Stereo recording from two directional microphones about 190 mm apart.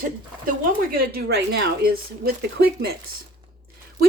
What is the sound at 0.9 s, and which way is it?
Speech, 50° right (ahead or behind).